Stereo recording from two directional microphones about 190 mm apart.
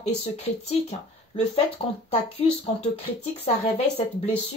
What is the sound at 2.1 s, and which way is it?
Speech, 30° left (ahead or behind).